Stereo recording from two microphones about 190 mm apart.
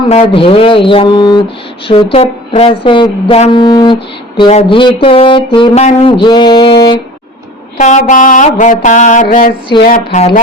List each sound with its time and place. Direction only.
0.0 s speech: 30° left (ahead or behind)
7.8 s mantra: 40° left (ahead or behind)
9.2 s a woman's voice: 50° left (ahead or behind)
10.2 s mantra: 35° left (ahead or behind)